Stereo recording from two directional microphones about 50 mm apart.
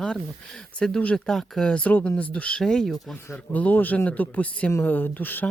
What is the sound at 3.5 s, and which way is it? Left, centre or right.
Speech, left.